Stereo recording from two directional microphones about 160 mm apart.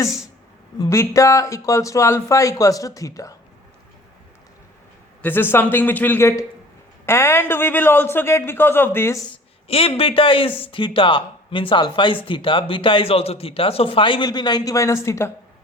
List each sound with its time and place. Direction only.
0.8 s speech: 20° left (ahead or behind)
5.2 s a man's voice: 15° left (ahead or behind)
9.6 s speech: 35° left (ahead or behind); by 15.3 s 15° left (ahead or behind)